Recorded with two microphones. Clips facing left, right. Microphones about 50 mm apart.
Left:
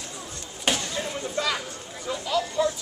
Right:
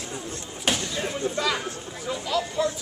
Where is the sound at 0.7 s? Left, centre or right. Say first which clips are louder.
Even; centre.